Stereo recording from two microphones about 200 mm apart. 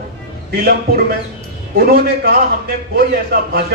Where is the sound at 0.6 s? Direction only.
50° right (ahead or behind).